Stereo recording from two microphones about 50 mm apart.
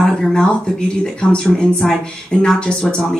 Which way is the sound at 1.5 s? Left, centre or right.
Centre.